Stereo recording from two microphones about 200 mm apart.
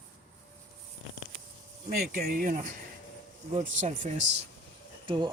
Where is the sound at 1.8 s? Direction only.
45° right (ahead or behind).